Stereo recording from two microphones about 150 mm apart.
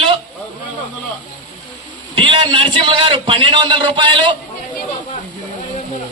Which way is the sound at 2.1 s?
35° right (ahead or behind).